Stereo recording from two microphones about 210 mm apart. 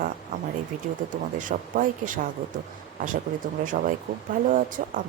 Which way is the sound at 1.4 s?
40° right (ahead or behind).